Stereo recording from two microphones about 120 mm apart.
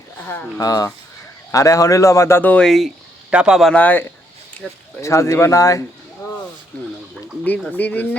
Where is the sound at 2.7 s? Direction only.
Centre (ahead or behind).